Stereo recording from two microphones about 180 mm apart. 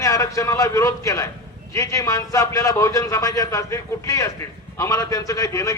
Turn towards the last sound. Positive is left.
turn(degrees=15)  # may be behind; listen again after turning